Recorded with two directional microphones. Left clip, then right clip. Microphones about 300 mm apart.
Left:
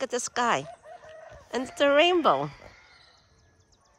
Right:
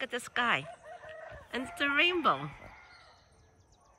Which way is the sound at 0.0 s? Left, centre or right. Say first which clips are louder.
Left 5 dB; centre.